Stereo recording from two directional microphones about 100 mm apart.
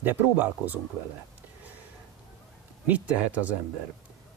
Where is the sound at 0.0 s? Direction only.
20° right (ahead or behind).